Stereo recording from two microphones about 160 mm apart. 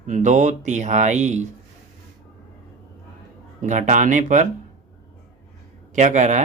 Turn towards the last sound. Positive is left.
turn(degrees=-50)  # may be behind; listen again after turning